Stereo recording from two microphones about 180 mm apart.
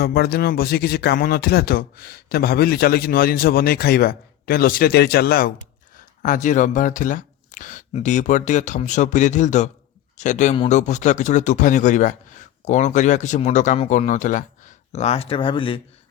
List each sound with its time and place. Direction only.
0.0 s speech: 60° left (ahead or behind); by 15.8 s 30° left (ahead or behind)